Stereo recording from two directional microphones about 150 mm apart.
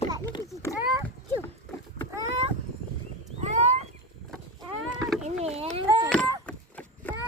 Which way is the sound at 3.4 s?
45° right (ahead or behind).